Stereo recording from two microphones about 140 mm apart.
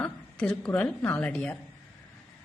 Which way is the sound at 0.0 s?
5° left (ahead or behind).